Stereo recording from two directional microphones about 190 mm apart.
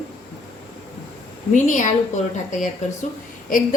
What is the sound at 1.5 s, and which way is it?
Speech, 40° left (ahead or behind).